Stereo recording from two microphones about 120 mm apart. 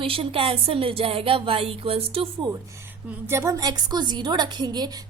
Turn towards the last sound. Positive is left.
turn(degrees=-35)  # may be behind; listen again after turning